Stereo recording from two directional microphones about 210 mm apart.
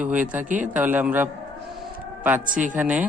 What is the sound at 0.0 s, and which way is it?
Speech, 5° right (ahead or behind).